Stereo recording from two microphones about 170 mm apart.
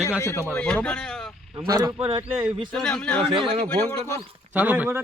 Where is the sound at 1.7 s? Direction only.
25° right (ahead or behind).